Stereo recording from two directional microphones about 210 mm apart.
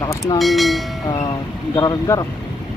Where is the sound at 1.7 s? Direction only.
20° left (ahead or behind).